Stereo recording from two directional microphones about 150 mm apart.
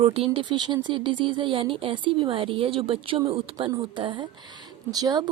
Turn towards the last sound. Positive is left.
turn(degrees=-25)  # may be behind; listen again after turning